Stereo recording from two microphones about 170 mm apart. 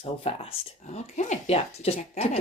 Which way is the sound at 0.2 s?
35° left (ahead or behind).